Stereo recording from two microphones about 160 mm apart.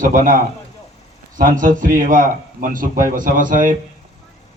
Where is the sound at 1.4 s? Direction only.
60° right (ahead or behind).